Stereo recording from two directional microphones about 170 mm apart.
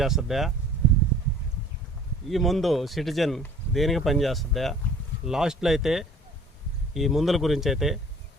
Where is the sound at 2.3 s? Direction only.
Centre (ahead or behind).